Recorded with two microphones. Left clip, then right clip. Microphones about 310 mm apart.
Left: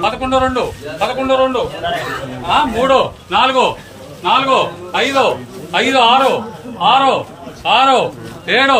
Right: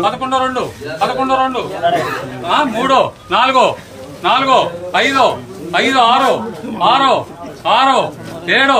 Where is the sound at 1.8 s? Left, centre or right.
Right.